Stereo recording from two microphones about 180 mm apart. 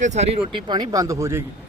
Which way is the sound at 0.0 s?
40° right (ahead or behind).